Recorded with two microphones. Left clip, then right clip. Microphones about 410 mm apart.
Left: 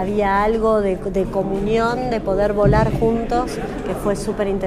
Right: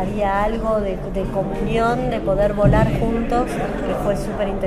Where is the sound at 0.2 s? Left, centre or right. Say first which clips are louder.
Left 2 dB; left.